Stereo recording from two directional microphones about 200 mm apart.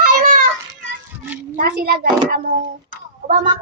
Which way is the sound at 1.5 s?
45° right (ahead or behind).